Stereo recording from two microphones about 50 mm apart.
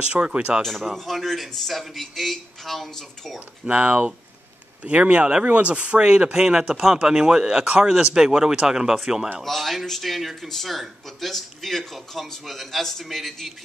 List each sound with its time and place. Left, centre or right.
0.0 s speech: right
0.6 s speech: centre
3.3 s speech: right
7.6 s speech: right
7.9 s speech: centre
9.4 s speech: centre